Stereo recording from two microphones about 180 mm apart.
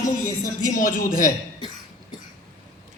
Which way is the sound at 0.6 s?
50° left (ahead or behind).